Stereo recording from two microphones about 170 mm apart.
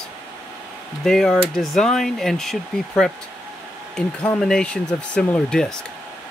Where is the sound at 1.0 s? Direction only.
5° left (ahead or behind).